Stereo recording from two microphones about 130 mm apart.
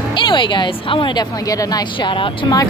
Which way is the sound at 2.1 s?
40° left (ahead or behind).